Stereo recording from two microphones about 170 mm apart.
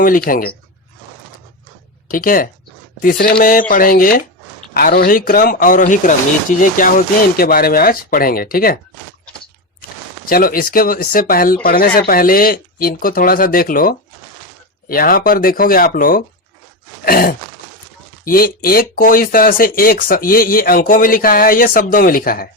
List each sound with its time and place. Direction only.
0.3 s speech: 55° left (ahead or behind)
2.0 s speech: 55° left (ahead or behind)
10.2 s speech: 60° left (ahead or behind)